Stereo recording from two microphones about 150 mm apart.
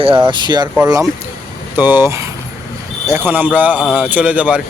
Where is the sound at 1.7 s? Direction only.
15° right (ahead or behind).